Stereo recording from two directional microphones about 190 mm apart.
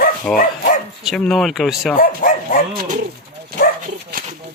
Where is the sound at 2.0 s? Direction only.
45° left (ahead or behind).